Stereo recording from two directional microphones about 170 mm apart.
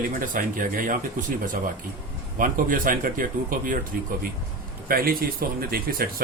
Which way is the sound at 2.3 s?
55° right (ahead or behind).